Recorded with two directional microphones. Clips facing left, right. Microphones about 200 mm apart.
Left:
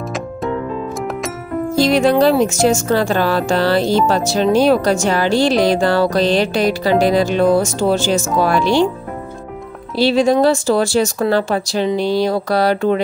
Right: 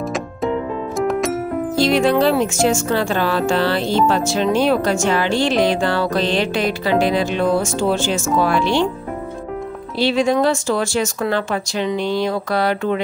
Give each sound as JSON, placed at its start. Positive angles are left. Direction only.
{"t": 0.9, "sound": "music", "side_deg": 0}
{"t": 1.8, "sound": "speech", "side_deg": 40}
{"t": 9.9, "sound": "speech", "side_deg": 35}